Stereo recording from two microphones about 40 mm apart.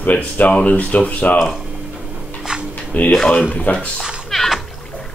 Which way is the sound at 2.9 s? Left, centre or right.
Left.